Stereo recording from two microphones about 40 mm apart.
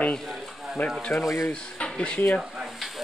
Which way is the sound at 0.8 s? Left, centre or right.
Left.